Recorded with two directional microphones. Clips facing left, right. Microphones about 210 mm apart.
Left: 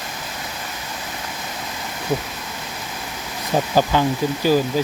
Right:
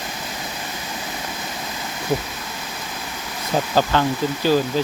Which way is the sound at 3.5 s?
10° left (ahead or behind).